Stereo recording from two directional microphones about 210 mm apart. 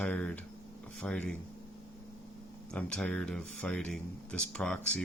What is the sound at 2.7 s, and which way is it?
Speech, 5° left (ahead or behind).